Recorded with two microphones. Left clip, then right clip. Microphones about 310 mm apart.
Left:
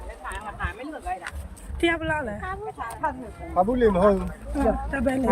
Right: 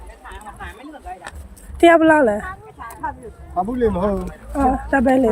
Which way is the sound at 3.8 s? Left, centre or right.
Centre.